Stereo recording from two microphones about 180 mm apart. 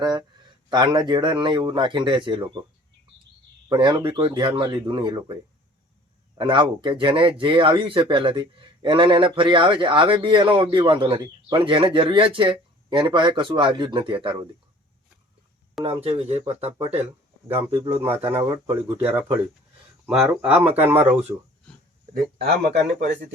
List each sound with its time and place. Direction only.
0.0 s speech: 25° right (ahead or behind)
3.7 s speech: 25° right (ahead or behind)
15.8 s speech: 30° right (ahead or behind)
17.7 s speech: 15° right (ahead or behind)
20.1 s speech: 5° right (ahead or behind)
22.1 s speech: 60° right (ahead or behind)
23.0 s speech: 40° right (ahead or behind)